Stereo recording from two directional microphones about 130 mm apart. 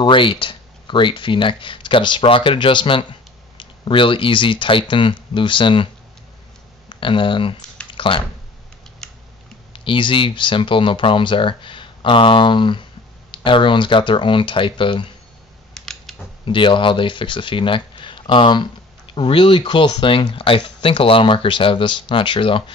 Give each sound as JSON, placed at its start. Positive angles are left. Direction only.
{"t": 0.0, "sound": "speech", "side_deg": 40}
{"t": 6.9, "sound": "speech", "side_deg": 40}
{"t": 7.9, "sound": "a sound", "side_deg": 40}
{"t": 9.0, "sound": "typing", "side_deg": 5}
{"t": 9.7, "sound": "speech", "side_deg": 40}
{"t": 15.7, "sound": "a sound", "side_deg": 5}
{"t": 16.4, "sound": "speech", "side_deg": 40}